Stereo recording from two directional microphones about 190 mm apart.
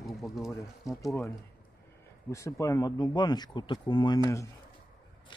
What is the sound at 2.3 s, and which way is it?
Speech, 15° left (ahead or behind).